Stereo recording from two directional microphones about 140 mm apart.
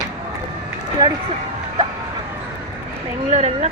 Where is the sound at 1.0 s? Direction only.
30° right (ahead or behind).